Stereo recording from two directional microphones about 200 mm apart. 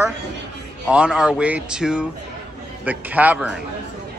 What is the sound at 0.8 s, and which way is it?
A man's voice, 5° right (ahead or behind).